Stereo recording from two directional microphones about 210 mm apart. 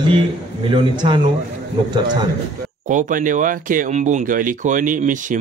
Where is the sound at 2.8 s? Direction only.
40° right (ahead or behind).